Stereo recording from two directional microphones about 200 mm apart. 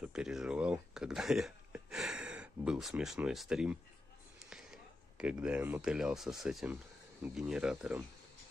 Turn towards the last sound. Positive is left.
turn(degrees=-5)  # may be behind; listen again after turning